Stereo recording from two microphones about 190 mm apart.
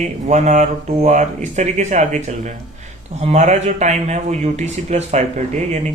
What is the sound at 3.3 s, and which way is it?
Speech, 40° right (ahead or behind).